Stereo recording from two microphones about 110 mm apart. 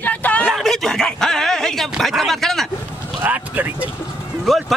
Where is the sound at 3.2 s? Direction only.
20° right (ahead or behind).